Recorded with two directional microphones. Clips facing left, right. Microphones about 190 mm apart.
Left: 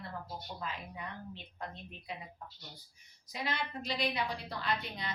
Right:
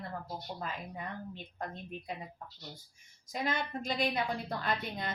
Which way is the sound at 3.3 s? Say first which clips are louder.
Right 3 dB; 50° right (ahead or behind).